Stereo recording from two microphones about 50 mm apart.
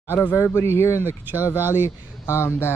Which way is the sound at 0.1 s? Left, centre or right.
Left.